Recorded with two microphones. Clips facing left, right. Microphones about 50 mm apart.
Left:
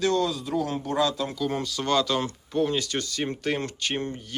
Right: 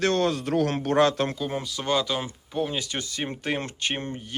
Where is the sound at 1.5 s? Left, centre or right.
Centre; by 4.3 s right.